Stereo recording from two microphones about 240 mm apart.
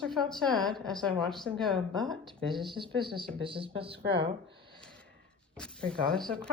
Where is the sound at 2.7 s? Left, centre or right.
Right.